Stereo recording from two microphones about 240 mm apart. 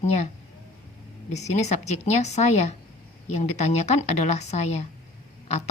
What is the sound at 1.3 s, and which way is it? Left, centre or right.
A woman's voice, left.